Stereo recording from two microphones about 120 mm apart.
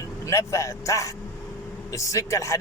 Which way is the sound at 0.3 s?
25° left (ahead or behind).